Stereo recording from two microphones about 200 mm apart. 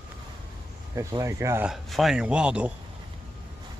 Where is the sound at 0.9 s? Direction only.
15° right (ahead or behind).